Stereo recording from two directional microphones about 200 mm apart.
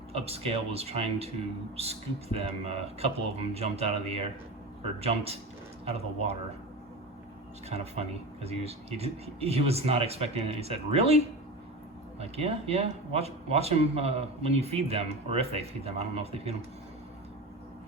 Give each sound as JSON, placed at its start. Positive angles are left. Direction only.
{"t": 0.1, "sound": "speech", "side_deg": -30}
{"t": 7.7, "sound": "speech", "side_deg": -30}
{"t": 12.2, "sound": "speech", "side_deg": -30}